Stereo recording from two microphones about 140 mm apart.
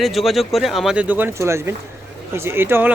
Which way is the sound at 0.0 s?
Centre (ahead or behind).